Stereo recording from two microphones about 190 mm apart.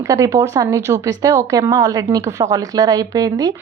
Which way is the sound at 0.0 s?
15° right (ahead or behind).